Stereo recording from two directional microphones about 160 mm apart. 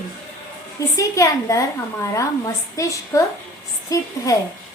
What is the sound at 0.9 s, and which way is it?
A woman's voice, 20° left (ahead or behind).